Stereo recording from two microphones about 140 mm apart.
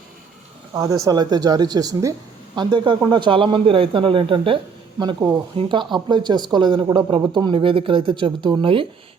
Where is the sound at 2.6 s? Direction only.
35° right (ahead or behind).